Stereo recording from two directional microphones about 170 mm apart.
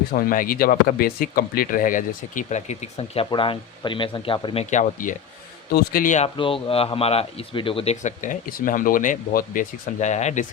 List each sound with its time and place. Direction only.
0.1 s speech: 55° left (ahead or behind); by 4.6 s 30° left (ahead or behind)
4.7 s speech: 45° left (ahead or behind)
6.2 s speech: 30° left (ahead or behind)